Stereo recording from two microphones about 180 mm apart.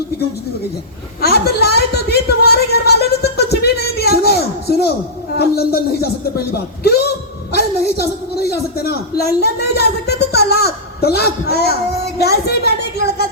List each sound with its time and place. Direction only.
1.2 s a woman's voice: 60° left (ahead or behind)
6.8 s a sound: 65° left (ahead or behind)
7.5 s a man's voice: 60° left (ahead or behind)